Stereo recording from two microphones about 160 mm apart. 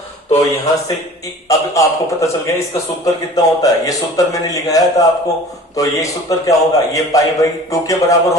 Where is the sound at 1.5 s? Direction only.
20° left (ahead or behind).